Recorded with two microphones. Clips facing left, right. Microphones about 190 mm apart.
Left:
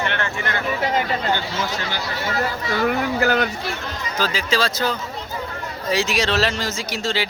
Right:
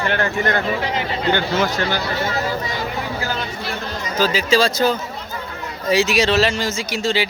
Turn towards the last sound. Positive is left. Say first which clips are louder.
# right 4 dB
turn(degrees=0)  # may be behind; listen again after turning